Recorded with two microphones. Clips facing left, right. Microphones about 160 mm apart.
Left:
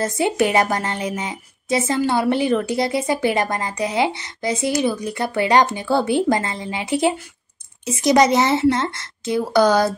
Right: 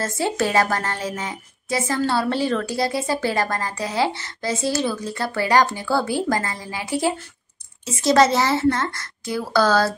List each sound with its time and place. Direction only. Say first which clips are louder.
0.0 s a woman's voice: left 4 dB; 20° left (ahead or behind)